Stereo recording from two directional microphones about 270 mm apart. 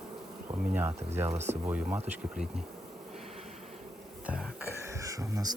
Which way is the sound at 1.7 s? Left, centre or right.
Centre.